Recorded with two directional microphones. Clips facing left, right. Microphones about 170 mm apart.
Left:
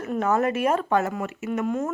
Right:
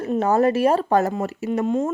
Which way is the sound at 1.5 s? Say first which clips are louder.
Right 4 dB; 25° right (ahead or behind).